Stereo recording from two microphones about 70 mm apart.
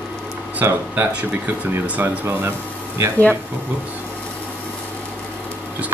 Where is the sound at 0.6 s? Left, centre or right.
Right.